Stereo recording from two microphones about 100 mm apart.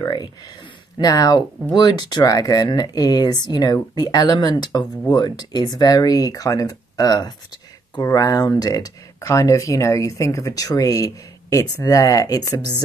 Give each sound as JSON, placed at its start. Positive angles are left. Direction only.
{"t": 0.0, "sound": "speech", "side_deg": 45}